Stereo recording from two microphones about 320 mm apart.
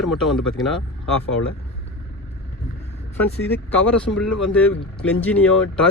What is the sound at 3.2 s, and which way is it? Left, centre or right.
Speech, centre.